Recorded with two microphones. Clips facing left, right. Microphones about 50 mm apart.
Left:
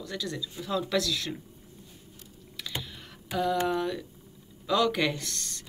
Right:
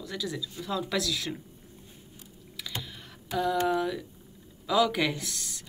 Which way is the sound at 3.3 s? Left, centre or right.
Centre.